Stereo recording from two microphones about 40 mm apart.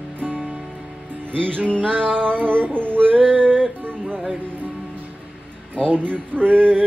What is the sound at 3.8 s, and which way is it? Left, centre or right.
Music, right.